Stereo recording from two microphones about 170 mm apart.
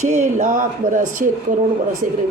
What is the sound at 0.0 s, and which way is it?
A woman's voice, 45° right (ahead or behind).